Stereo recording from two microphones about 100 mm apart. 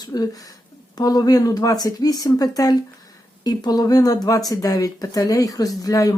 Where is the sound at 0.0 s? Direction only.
40° left (ahead or behind).